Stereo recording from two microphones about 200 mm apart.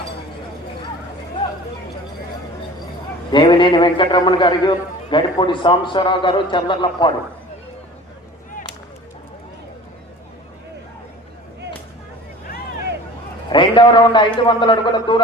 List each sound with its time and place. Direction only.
3.3 s a man's voice: 25° left (ahead or behind)
13.5 s a man's voice: 25° left (ahead or behind)